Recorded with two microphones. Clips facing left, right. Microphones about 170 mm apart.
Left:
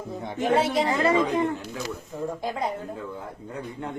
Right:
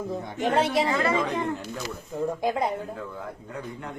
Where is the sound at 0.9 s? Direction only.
35° left (ahead or behind).